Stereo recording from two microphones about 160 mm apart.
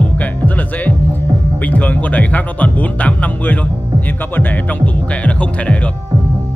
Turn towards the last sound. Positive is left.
turn(degrees=10)  # may be behind; listen again after turning